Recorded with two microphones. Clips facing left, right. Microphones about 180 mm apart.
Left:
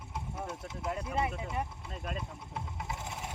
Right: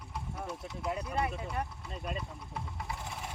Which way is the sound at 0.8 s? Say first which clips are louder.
Even; centre (ahead or behind).